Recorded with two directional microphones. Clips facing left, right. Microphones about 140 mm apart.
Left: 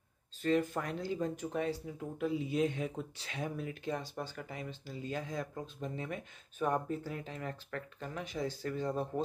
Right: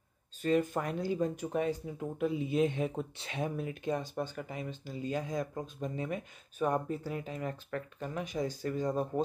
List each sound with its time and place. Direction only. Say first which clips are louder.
0.4 s speech: right 2 dB; 15° right (ahead or behind)